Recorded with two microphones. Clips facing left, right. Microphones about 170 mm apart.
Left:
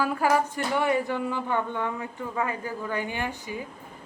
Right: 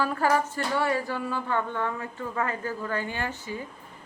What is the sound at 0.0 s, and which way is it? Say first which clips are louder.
Speech: left 1 dB; 10° left (ahead or behind).